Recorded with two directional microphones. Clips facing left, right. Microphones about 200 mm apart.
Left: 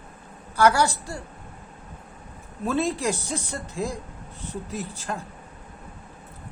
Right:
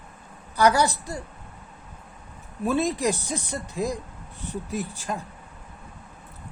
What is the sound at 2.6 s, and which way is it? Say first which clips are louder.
Speech: right 1 dB; 15° right (ahead or behind).